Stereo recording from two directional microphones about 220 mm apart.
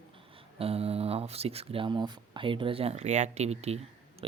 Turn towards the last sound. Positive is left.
turn(degrees=-30)  # may be behind; listen again after turning